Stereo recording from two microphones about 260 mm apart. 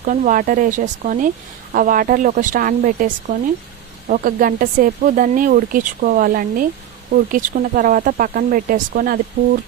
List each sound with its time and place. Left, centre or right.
0.0 s speech: right